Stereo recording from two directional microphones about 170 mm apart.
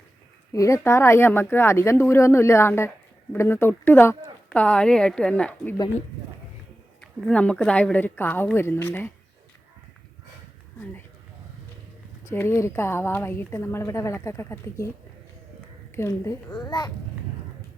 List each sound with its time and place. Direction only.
0.5 s a woman's voice: 20° left (ahead or behind)
7.0 s a woman's voice: 5° left (ahead or behind)
12.2 s a woman's voice: 15° left (ahead or behind)
16.0 s a child's voice: 15° left (ahead or behind)